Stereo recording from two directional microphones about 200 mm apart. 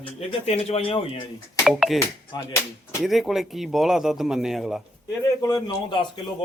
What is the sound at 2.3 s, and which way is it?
Speech, 15° left (ahead or behind).